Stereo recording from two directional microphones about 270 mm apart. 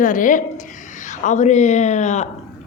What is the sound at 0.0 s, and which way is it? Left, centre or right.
A woman's voice, left.